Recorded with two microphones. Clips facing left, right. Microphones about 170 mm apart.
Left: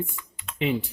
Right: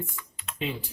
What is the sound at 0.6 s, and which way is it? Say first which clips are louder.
Speech: left 7 dB; 65° left (ahead or behind).